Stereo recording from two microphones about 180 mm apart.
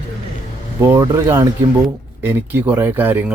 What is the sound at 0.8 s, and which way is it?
Speech, 20° right (ahead or behind).